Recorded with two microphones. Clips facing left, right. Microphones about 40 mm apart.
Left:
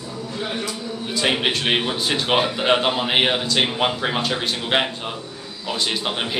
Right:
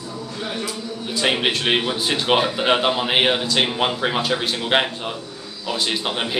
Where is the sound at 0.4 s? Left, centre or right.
Centre.